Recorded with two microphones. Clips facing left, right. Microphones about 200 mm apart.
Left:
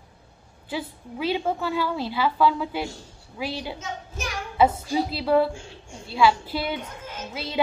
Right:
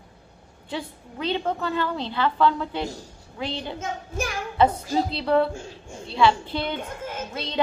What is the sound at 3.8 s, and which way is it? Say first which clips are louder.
Child singing: right 5 dB; 55° right (ahead or behind).